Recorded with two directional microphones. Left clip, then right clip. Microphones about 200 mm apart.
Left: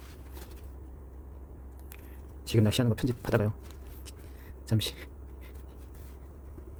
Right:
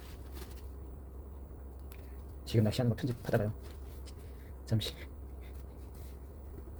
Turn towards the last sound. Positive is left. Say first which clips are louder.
# left 5 dB
turn(degrees=25)  # may be behind; listen again after turning